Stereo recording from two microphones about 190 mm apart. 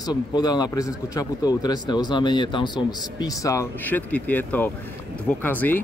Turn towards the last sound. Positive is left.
turn(degrees=10)  # may be behind; listen again after turning